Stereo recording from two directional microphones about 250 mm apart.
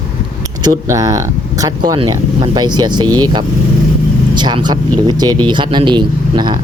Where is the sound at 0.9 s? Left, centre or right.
Centre.